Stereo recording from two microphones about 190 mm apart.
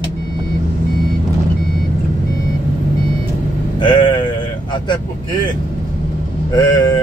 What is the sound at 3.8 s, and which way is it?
Sheep, 25° left (ahead or behind).